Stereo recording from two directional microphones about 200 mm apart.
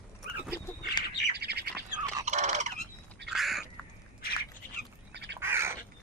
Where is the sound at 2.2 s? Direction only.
35° right (ahead or behind).